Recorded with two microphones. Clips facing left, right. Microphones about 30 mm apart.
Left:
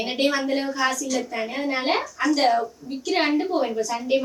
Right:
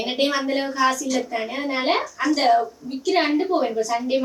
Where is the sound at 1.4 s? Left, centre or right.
Centre.